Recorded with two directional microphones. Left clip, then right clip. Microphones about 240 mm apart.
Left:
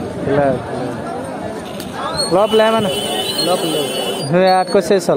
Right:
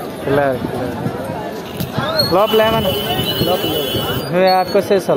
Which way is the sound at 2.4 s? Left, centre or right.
Centre.